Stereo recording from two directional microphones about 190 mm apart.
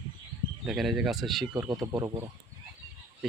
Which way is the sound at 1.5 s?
15° right (ahead or behind).